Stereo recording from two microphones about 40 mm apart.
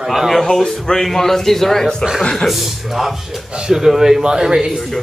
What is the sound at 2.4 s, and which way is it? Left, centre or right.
Speech, centre.